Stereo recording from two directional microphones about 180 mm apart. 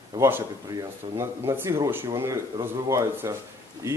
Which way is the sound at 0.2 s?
15° right (ahead or behind).